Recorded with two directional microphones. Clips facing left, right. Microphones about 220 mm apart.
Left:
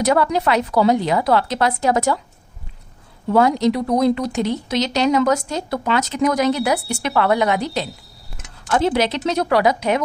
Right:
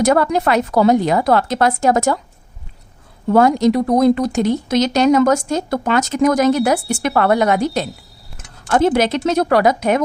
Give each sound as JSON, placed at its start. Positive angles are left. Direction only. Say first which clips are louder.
{"t": 0.0, "sound": "speech", "louder": "right 3 dB", "side_deg": -50}
{"t": 3.2, "sound": "speech", "louder": "right 3 dB", "side_deg": -50}